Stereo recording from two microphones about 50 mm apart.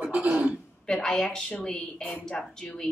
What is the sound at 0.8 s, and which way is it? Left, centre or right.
A woman's voice, centre.